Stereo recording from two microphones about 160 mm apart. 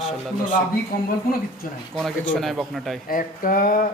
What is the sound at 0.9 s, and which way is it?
Speech, 70° left (ahead or behind).